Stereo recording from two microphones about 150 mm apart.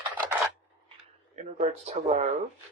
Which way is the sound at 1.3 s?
45° right (ahead or behind).